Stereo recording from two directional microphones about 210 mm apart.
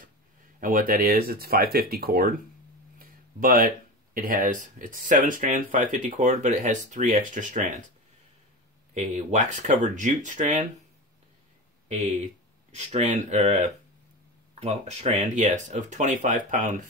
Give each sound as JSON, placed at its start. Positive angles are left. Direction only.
{"t": 0.6, "sound": "speech", "side_deg": -40}
{"t": 8.9, "sound": "speech", "side_deg": -35}
{"t": 12.7, "sound": "speech", "side_deg": -35}